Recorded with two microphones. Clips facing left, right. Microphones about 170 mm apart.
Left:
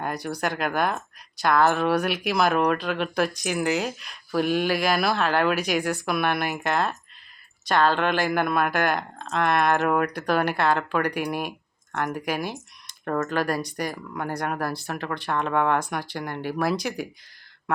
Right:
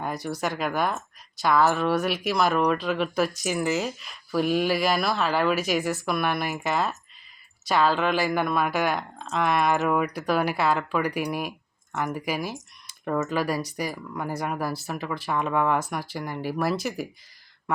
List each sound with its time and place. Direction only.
0.0 s speech: centre (ahead or behind)